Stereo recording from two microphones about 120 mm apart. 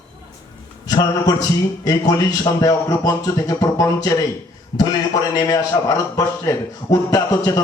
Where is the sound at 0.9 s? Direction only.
35° left (ahead or behind).